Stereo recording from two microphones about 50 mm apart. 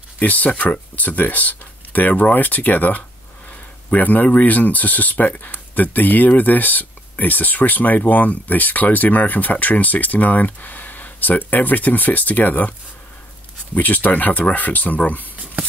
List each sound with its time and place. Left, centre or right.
0.2 s speech: left
13.7 s speech: left